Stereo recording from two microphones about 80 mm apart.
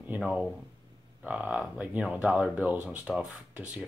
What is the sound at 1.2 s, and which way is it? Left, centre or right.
Speech, centre.